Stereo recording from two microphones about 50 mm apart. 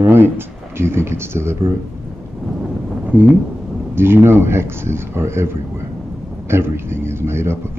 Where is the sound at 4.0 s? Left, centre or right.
Right.